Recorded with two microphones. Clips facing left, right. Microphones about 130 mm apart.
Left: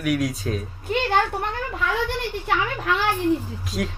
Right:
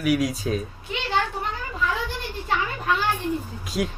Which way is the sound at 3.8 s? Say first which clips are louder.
Right 1 dB; 5° right (ahead or behind).